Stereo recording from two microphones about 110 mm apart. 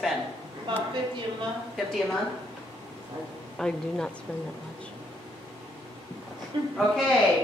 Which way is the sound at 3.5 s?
5° left (ahead or behind).